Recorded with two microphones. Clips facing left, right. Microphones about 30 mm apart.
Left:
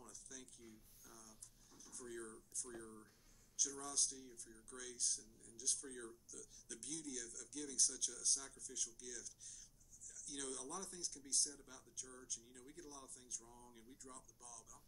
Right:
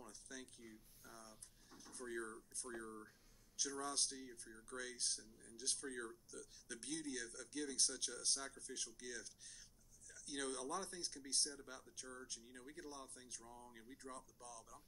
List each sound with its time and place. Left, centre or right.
0.0 s a sound: right
2.1 s speech: right
12.4 s speech: right
12.7 s speech: right